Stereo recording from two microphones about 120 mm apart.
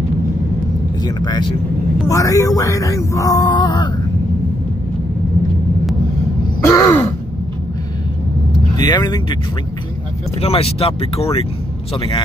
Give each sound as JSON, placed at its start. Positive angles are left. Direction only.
{"t": 1.0, "sound": "speech", "side_deg": 35}
{"t": 6.7, "sound": "a sound", "side_deg": 25}
{"t": 8.7, "sound": "speech", "side_deg": 35}
{"t": 10.4, "sound": "speech", "side_deg": 55}